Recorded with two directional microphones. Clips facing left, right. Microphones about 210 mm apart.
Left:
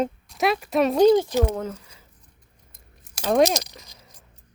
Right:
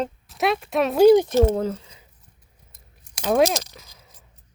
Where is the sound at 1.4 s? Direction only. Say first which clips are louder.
Right 5 dB; 30° right (ahead or behind).